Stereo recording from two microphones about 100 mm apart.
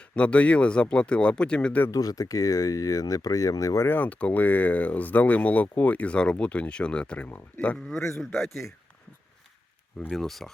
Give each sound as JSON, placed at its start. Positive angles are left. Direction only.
{"t": 0.2, "sound": "speech", "side_deg": 10}
{"t": 1.9, "sound": "speech", "side_deg": 35}
{"t": 3.8, "sound": "speech", "side_deg": 15}
{"t": 7.9, "sound": "a man's voice", "side_deg": 30}
{"t": 10.1, "sound": "speech", "side_deg": 5}